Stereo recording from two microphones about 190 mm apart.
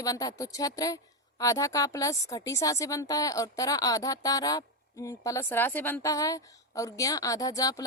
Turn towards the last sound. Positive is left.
turn(degrees=20)  # may be behind; listen again after turning